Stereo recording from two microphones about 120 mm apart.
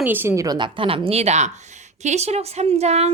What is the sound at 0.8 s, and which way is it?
Speech, 50° right (ahead or behind).